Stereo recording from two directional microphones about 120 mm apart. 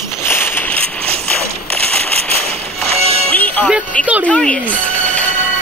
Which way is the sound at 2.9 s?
55° right (ahead or behind).